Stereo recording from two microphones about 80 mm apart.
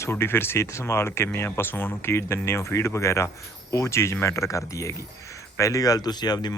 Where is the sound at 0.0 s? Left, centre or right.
Left.